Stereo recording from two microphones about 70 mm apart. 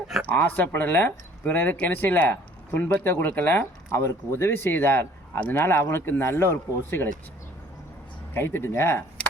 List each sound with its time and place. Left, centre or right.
0.3 s speech: left
8.3 s speech: left